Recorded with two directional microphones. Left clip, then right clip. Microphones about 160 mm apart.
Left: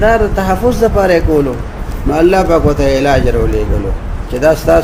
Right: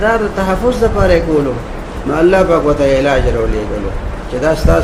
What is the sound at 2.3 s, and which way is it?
Speech, 70° left (ahead or behind).